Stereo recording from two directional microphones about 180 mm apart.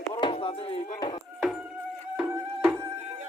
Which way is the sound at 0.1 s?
25° left (ahead or behind).